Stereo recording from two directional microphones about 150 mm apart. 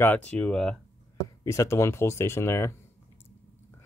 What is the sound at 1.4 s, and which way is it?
Speech, 20° left (ahead or behind).